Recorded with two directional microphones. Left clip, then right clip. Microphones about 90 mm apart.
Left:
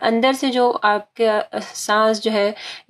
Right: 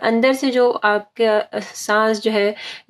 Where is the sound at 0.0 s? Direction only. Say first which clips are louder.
Right 1 dB; 15° left (ahead or behind).